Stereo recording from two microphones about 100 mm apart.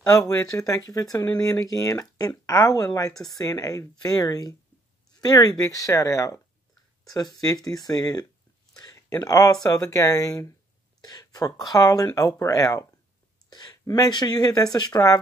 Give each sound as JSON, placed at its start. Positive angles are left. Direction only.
{"t": 0.0, "sound": "speech", "side_deg": 35}